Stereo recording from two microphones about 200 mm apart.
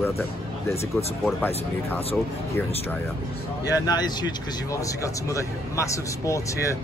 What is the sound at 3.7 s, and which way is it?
Speech, 20° left (ahead or behind).